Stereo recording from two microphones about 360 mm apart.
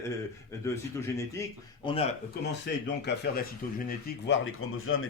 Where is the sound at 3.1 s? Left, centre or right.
Left.